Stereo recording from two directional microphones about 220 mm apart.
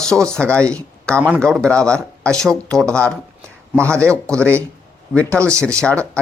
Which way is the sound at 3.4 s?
10° right (ahead or behind).